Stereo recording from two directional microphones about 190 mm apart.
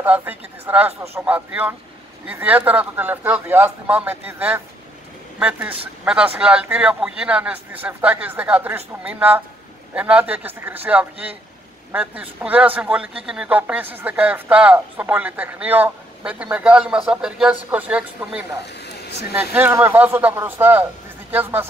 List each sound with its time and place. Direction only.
0.0 s speech: 10° right (ahead or behind)
18.8 s a sound: 60° left (ahead or behind)
19.5 s speech: 10° right (ahead or behind)